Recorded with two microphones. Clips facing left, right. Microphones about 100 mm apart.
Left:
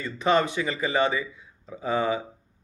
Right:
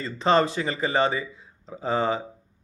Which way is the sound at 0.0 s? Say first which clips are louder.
Right 2 dB; 35° right (ahead or behind).